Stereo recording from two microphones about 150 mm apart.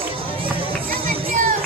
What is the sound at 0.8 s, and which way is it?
Music, 70° right (ahead or behind).